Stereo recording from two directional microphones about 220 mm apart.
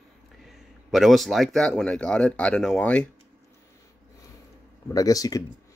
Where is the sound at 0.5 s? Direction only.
Centre (ahead or behind).